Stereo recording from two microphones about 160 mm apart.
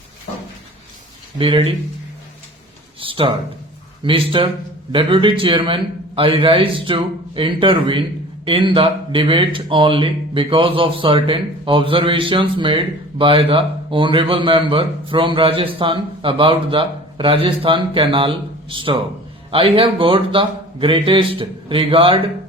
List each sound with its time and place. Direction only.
1.4 s speech: 35° right (ahead or behind)
3.0 s speech: 35° right (ahead or behind)